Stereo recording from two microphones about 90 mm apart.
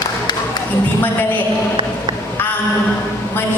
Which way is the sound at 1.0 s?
20° left (ahead or behind).